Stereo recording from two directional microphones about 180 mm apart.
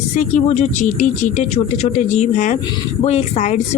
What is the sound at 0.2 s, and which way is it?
Speech, 40° left (ahead or behind).